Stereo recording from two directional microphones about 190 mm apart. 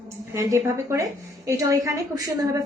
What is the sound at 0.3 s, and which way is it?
A woman's voice, 15° right (ahead or behind).